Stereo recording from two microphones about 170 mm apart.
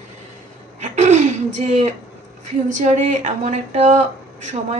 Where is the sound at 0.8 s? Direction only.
45° right (ahead or behind).